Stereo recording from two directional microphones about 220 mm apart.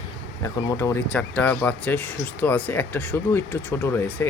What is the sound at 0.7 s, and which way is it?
Speech, 15° left (ahead or behind).